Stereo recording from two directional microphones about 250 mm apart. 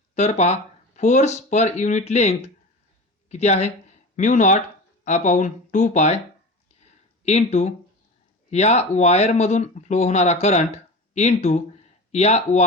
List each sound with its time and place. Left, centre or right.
0.1 s speech: left
7.3 s speech: left